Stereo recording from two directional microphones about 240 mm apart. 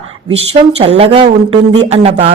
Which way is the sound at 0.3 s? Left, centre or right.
Right.